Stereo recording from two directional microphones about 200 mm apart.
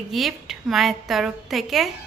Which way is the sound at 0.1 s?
Centre (ahead or behind).